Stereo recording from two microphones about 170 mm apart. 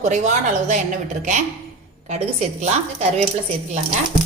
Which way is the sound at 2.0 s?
40° right (ahead or behind).